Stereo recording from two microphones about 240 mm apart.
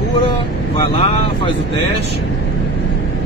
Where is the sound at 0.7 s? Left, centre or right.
Left.